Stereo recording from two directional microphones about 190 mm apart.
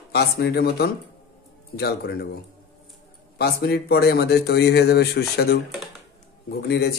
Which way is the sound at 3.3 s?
55° left (ahead or behind).